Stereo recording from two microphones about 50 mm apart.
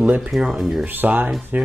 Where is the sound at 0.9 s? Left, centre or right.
Right.